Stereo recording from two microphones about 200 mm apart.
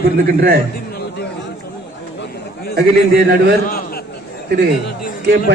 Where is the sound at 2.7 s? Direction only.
55° right (ahead or behind).